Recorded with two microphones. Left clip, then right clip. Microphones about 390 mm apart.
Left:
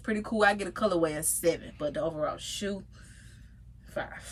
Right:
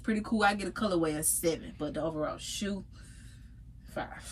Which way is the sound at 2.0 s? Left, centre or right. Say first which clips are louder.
Left 1 dB; left.